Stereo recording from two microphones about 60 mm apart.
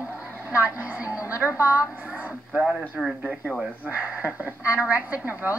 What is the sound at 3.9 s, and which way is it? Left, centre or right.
A woman's voice, right.